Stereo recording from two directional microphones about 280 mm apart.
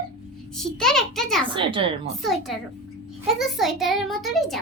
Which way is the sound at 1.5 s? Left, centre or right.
Centre.